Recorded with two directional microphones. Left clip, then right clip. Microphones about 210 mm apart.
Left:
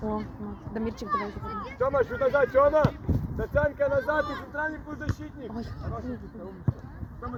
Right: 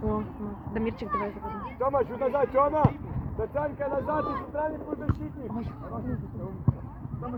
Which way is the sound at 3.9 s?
30° right (ahead or behind).